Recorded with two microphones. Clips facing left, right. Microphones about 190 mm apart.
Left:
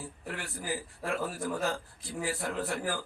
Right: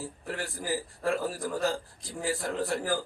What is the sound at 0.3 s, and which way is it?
A man's voice, 40° right (ahead or behind).